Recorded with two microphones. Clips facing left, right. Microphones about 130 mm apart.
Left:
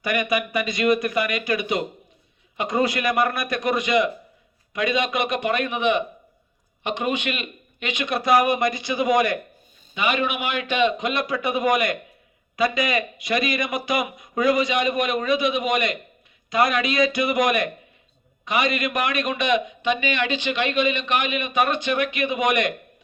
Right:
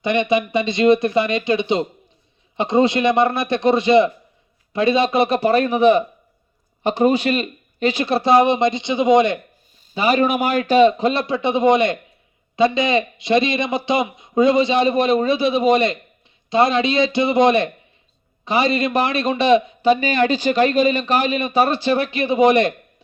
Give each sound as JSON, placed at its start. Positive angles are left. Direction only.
{"t": 0.0, "sound": "a man's voice", "side_deg": -25}
{"t": 9.9, "sound": "a man's voice", "side_deg": -35}